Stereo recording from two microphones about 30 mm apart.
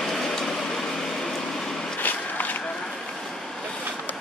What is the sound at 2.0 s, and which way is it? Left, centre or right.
Walk, left.